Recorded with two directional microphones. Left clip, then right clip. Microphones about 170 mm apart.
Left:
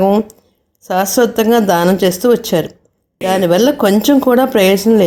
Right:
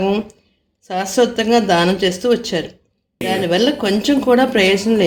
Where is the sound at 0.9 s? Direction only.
40° left (ahead or behind).